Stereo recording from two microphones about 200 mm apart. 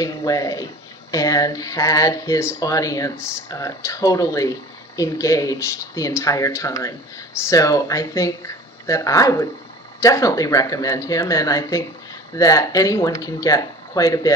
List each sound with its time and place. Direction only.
0.0 s speech: 15° left (ahead or behind)